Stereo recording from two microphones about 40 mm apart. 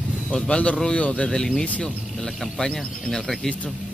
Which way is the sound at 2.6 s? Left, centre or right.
Centre.